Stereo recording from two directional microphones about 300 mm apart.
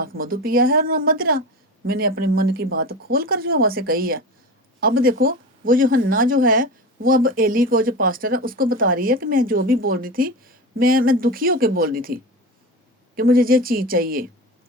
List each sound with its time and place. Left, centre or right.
0.2 s speech: right